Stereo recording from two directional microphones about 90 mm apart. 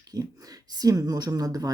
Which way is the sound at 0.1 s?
45° right (ahead or behind).